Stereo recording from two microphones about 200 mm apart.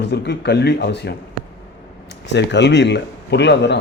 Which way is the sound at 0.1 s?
55° left (ahead or behind).